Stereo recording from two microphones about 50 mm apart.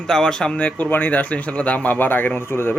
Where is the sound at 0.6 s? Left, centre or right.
Left.